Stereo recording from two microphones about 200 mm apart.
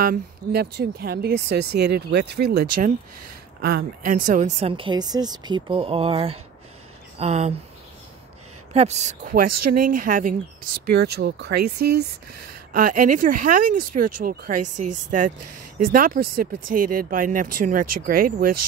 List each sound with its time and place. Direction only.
0.0 s speech: 50° right (ahead or behind); by 7.5 s 35° right (ahead or behind)
8.7 s speech: 35° right (ahead or behind)
10.9 s speech: 55° right (ahead or behind)
12.7 s speech: 40° right (ahead or behind)